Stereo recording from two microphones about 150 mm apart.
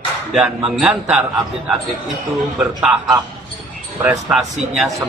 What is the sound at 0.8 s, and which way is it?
Speech, 10° right (ahead or behind).